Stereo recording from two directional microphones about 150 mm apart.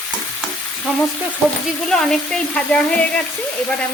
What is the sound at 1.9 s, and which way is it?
Speech, 5° left (ahead or behind).